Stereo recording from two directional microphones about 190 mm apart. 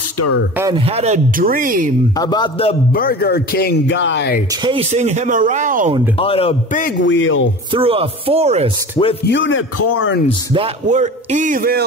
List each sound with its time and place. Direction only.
0.7 s speech: 30° right (ahead or behind)
2.1 s a man's voice: 20° left (ahead or behind)
2.9 s speech: 50° left (ahead or behind); by 4.4 s 65° left (ahead or behind)
4.6 s speech: 35° right (ahead or behind)
6.1 s a man's voice: 30° left (ahead or behind)
7.0 s a man's voice: 75° left (ahead or behind)
7.7 s speech: 30° right (ahead or behind)
9.2 s speech: 75° left (ahead or behind)
10.5 s speech: 35° right (ahead or behind)